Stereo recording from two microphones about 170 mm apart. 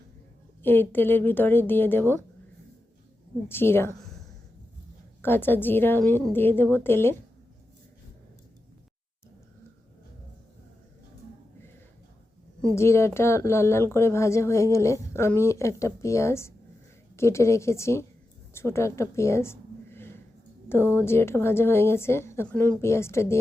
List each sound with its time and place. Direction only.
0.6 s speech: 10° left (ahead or behind)
3.5 s speech: 15° left (ahead or behind)
5.2 s speech: 10° left (ahead or behind)
12.7 s a woman's voice: 15° left (ahead or behind)